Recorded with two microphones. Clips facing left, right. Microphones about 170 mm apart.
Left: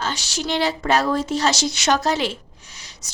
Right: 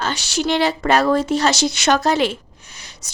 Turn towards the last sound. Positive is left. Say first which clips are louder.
# right 2 dB
turn(degrees=-55)  # may be behind; listen again after turning